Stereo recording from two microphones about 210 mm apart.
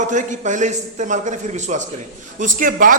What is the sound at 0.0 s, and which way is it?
A man's voice, 35° right (ahead or behind).